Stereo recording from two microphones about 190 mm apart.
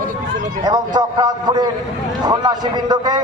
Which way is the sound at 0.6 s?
20° right (ahead or behind).